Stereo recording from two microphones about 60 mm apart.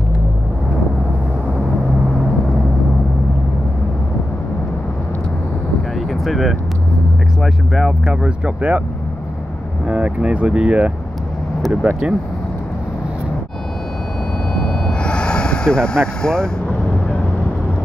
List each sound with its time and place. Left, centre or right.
6.2 s vehicle: centre
8.1 s speech: right
9.8 s speech: centre
11.9 s speech: centre
14.5 s vehicle: centre